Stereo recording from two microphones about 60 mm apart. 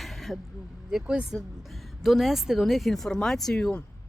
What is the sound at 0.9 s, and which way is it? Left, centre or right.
Speech, centre.